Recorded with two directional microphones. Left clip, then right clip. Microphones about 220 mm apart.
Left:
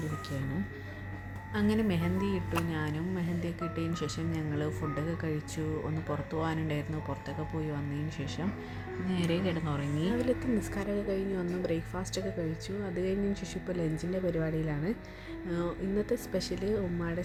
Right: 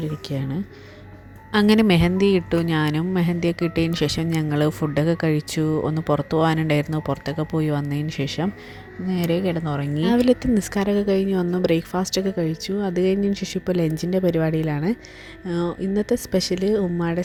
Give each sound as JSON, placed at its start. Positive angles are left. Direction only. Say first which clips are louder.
{"t": 1.5, "sound": "a woman's voice", "louder": "right 14 dB", "side_deg": -40}